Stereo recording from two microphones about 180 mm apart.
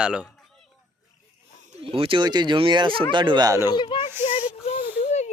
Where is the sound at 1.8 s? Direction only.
30° right (ahead or behind).